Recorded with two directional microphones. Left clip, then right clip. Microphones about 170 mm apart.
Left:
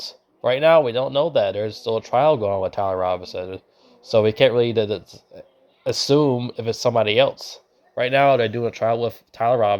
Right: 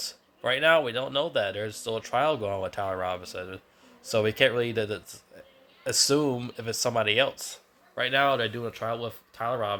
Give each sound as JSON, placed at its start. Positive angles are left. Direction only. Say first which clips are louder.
{"t": 0.4, "sound": "speech", "louder": "left 7 dB", "side_deg": 25}